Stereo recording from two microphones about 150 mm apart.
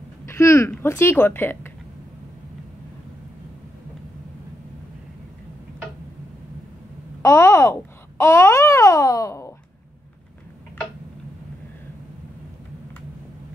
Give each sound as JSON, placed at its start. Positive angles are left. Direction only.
{"t": 0.2, "sound": "speech", "side_deg": 20}
{"t": 7.2, "sound": "babbling", "side_deg": 20}